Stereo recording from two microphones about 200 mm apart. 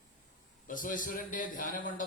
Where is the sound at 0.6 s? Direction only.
45° left (ahead or behind).